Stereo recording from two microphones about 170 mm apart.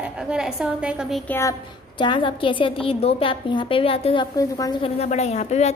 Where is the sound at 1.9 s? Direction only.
30° left (ahead or behind).